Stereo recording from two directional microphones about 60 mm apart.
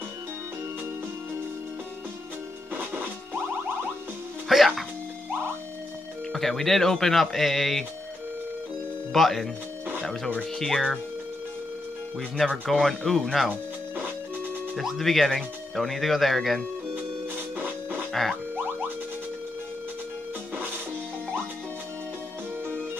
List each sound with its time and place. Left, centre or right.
4.5 s music: centre
6.3 s speech: centre
9.1 s speech: centre
12.4 s speech: centre
13.5 s music: right
14.8 s speech: centre
17.6 s music: right
18.1 s boing: centre